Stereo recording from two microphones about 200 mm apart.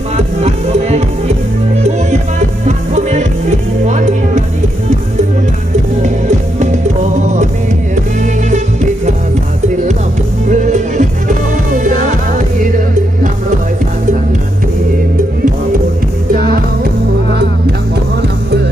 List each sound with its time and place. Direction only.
0.3 s music: 35° right (ahead or behind)
8.4 s music: 35° right (ahead or behind)
10.5 s music: 40° right (ahead or behind)